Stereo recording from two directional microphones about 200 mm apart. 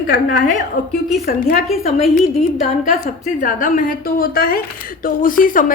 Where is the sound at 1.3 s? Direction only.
45° left (ahead or behind).